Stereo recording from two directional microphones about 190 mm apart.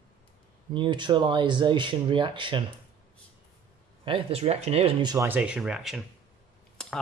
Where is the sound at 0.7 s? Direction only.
25° right (ahead or behind).